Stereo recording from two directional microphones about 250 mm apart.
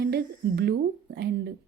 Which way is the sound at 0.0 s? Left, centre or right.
Right.